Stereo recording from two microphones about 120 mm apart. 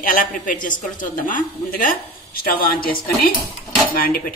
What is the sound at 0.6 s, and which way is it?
Speech, 90° left.